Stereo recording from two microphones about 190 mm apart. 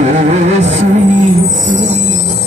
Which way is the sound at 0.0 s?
35° right (ahead or behind).